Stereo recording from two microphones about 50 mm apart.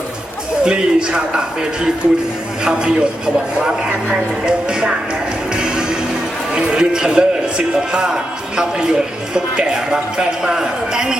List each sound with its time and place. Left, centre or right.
0.6 s speech: centre
2.6 s speech: centre
4.4 s speech: centre
5.5 s music: centre
6.5 s speech: centre